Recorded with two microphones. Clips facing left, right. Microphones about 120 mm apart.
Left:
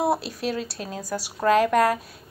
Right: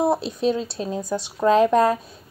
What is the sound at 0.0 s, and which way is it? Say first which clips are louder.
A woman's voice: right 4 dB; 25° right (ahead or behind).